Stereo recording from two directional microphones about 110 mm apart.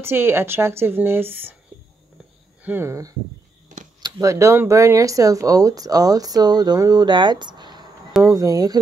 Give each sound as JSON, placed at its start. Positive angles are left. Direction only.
{"t": 0.0, "sound": "a woman's voice", "side_deg": -20}
{"t": 2.6, "sound": "a woman's voice", "side_deg": -20}
{"t": 8.2, "sound": "speech", "side_deg": -30}